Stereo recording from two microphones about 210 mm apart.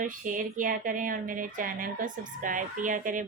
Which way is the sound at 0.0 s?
40° right (ahead or behind).